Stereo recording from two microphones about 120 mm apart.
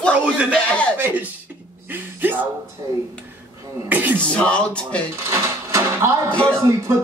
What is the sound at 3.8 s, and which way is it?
Speech, 15° right (ahead or behind).